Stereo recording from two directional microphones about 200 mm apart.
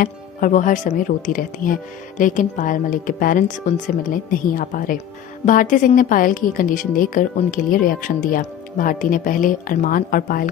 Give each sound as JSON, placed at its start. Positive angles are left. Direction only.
{"t": 0.0, "sound": "speech", "side_deg": 40}